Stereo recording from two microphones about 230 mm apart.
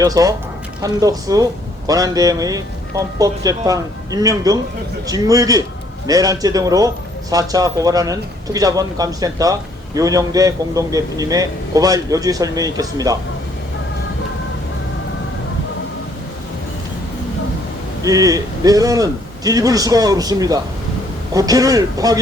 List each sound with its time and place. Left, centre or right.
0.0 s speech: centre
18.0 s speech: centre